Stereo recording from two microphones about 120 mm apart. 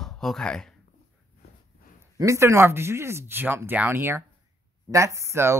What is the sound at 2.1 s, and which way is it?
Speech, 25° right (ahead or behind).